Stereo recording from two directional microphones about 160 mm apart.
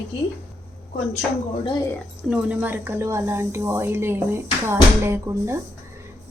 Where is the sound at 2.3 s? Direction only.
10° right (ahead or behind).